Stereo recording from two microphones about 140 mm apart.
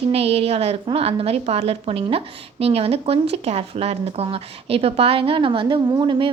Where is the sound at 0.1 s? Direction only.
45° right (ahead or behind).